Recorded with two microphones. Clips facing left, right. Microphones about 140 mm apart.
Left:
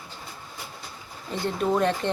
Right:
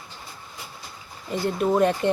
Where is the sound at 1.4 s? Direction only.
10° right (ahead or behind).